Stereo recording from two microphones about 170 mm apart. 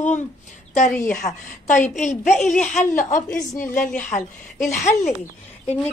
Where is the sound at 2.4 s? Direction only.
5° left (ahead or behind).